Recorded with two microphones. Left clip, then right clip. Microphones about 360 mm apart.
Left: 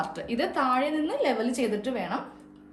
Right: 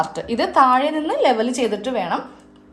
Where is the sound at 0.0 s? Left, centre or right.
Centre.